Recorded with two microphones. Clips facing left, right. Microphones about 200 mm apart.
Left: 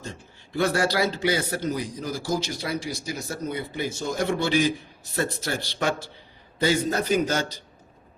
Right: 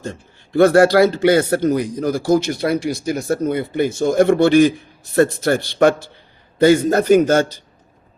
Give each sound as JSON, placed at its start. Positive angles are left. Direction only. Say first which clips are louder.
{"t": 0.0, "sound": "a man's voice", "louder": "right 9 dB", "side_deg": -55}